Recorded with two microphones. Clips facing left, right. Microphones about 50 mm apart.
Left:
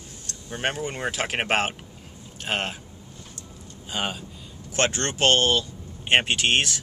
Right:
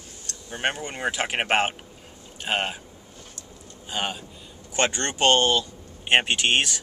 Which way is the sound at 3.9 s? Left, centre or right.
Centre.